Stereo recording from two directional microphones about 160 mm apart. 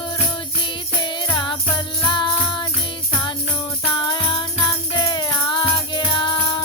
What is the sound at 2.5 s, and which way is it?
Jingle bell, 30° left (ahead or behind).